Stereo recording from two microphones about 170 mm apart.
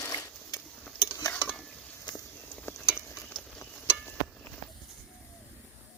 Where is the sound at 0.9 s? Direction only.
20° left (ahead or behind).